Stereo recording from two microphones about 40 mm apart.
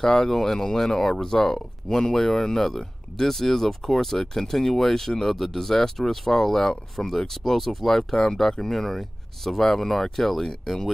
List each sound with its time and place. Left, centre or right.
0.0 s speech: centre